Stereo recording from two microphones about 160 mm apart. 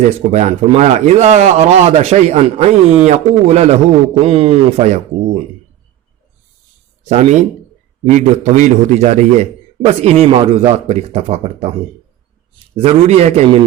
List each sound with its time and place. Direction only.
0.3 s a man's voice: 45° right (ahead or behind)
7.1 s a man's voice: 45° right (ahead or behind)
8.4 s a man's voice: 50° right (ahead or behind)
12.7 s speech: 40° right (ahead or behind)